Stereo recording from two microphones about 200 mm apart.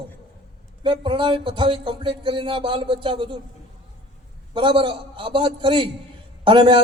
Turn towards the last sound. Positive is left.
turn(degrees=-25)  # may be behind; listen again after turning